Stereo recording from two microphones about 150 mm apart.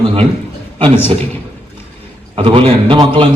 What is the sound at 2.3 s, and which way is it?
A man's voice, 35° right (ahead or behind).